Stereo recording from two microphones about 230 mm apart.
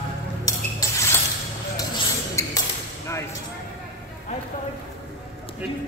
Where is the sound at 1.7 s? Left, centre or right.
Centre.